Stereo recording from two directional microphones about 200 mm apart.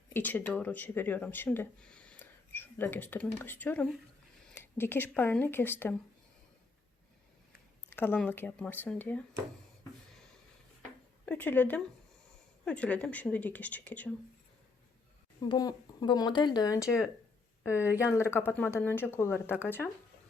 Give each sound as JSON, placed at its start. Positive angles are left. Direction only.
{"t": 0.1, "sound": "speech", "side_deg": 10}
{"t": 7.9, "sound": "speech", "side_deg": 10}
{"t": 11.3, "sound": "speech", "side_deg": 10}
{"t": 15.4, "sound": "speech", "side_deg": 20}
{"t": 18.2, "sound": "speech", "side_deg": 10}